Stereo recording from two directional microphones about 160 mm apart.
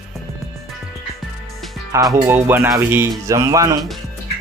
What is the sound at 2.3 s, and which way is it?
Speech, 15° right (ahead or behind).